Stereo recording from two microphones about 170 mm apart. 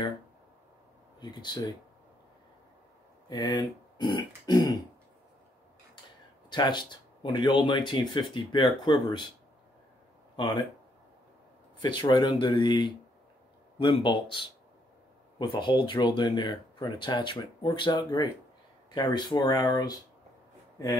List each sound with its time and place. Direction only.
1.2 s speech: 25° left (ahead or behind)
3.3 s speech: 25° left (ahead or behind)
6.5 s speech: 25° left (ahead or behind)
10.3 s speech: 25° left (ahead or behind)
11.8 s speech: 25° left (ahead or behind)